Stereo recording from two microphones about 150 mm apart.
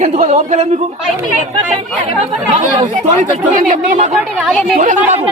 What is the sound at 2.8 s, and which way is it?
A woman's voice, 55° right (ahead or behind).